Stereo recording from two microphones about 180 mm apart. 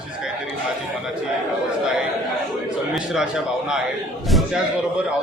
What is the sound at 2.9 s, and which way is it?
A man's voice, 5° right (ahead or behind).